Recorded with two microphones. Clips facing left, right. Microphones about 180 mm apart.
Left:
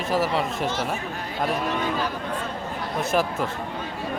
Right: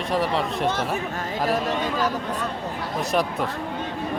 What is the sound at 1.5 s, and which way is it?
Speech, 40° right (ahead or behind).